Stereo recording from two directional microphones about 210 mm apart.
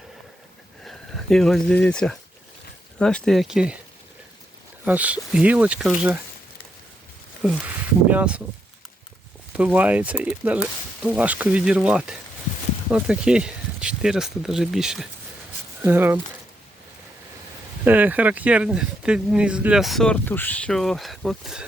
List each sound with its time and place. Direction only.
0.9 s speech: centre (ahead or behind)
4.9 s speech: 5° right (ahead or behind)
7.4 s speech: 5° right (ahead or behind)
9.5 s speech: 5° right (ahead or behind)
17.8 s speech: 10° right (ahead or behind)